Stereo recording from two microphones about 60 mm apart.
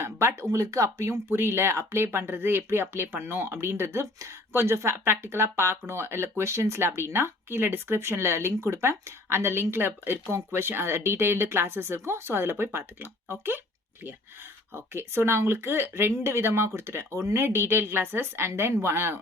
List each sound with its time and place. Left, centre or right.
0.0 s a sound: right
0.4 s speech: right
1.3 s speech: right
14.7 s speech: right